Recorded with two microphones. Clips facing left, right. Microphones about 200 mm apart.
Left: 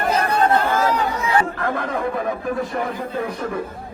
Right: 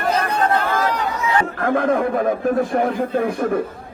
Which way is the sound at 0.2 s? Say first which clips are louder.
Left 1 dB; 30° left (ahead or behind).